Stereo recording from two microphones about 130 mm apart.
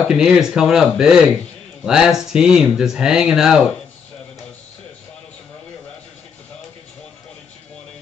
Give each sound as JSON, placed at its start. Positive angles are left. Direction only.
{"t": 0.1, "sound": "speech", "side_deg": -5}